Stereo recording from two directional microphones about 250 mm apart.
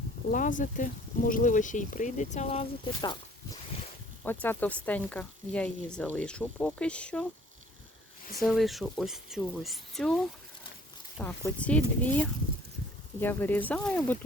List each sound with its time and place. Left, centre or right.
0.3 s speech: left
4.3 s speech: centre
8.4 s speech: centre
11.2 s speech: centre